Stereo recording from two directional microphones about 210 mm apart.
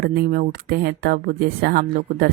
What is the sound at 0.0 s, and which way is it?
Speech, 45° right (ahead or behind).